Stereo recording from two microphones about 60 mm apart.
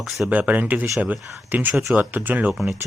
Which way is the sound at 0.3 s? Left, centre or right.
Right.